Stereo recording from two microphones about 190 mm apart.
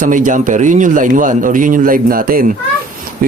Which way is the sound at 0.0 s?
45° right (ahead or behind).